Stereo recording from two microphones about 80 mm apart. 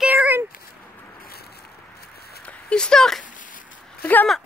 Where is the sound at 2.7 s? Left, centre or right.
Centre.